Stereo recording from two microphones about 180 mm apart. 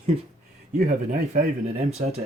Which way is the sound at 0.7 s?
45° right (ahead or behind).